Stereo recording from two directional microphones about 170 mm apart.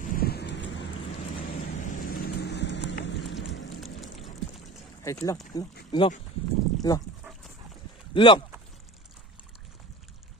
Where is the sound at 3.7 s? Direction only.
Centre (ahead or behind).